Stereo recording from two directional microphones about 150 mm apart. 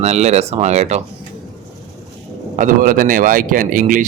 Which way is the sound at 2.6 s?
65° right (ahead or behind).